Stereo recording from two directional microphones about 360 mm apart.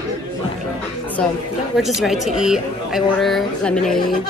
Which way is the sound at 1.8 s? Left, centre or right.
Centre.